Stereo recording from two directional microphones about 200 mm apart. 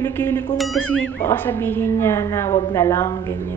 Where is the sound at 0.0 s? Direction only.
10° left (ahead or behind).